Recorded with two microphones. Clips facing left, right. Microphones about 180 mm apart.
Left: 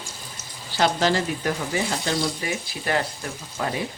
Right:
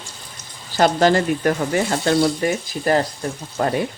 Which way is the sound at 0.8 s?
50° right (ahead or behind).